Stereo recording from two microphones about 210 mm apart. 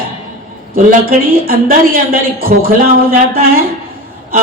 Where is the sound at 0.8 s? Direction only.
40° right (ahead or behind).